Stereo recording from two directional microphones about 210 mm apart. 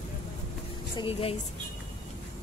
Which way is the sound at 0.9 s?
25° left (ahead or behind).